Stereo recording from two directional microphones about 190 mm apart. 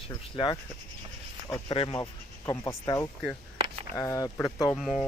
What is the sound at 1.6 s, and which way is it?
Speech, 25° left (ahead or behind).